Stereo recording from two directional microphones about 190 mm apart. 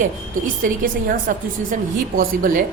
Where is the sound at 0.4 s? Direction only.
45° right (ahead or behind).